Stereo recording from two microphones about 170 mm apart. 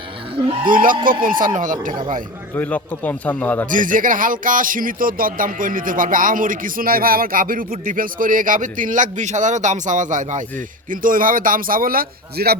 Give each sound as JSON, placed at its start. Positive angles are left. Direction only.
{"t": 0.6, "sound": "speech", "side_deg": -55}
{"t": 2.6, "sound": "speech", "side_deg": 10}
{"t": 3.7, "sound": "speech", "side_deg": -50}